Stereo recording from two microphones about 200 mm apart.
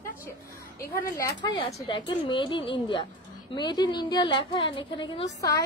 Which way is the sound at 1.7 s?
25° left (ahead or behind).